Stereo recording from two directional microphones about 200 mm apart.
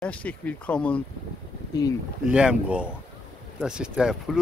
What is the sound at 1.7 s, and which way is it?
Speech, 20° left (ahead or behind).